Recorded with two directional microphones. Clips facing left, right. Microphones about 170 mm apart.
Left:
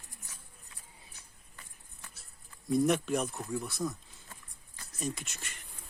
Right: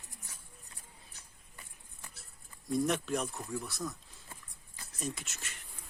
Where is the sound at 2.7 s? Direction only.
Centre (ahead or behind).